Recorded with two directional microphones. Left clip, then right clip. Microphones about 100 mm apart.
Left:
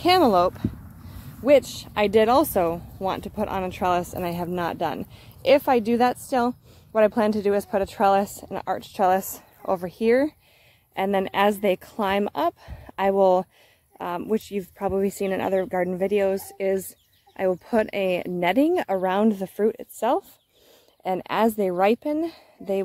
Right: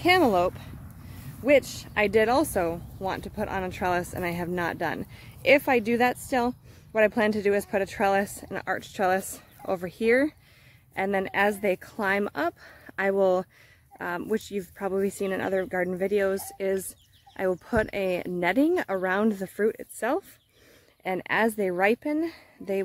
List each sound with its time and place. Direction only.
0.0 s a woman's voice: 30° left (ahead or behind)
11.0 s a woman's voice: 30° left (ahead or behind); by 22.8 s 15° left (ahead or behind)